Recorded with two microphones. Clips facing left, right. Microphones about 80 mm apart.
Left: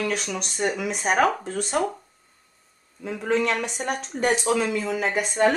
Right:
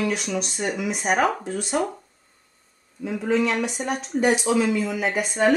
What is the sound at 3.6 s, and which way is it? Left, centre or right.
Speech, left.